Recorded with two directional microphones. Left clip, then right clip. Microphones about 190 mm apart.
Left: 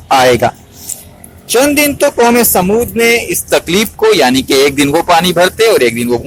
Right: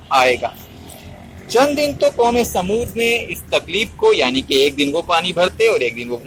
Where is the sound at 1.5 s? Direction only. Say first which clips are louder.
Left 5 dB; 45° left (ahead or behind).